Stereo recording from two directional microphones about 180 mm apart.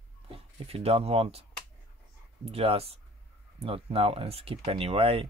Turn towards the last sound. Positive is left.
turn(degrees=-30)  # may be behind; listen again after turning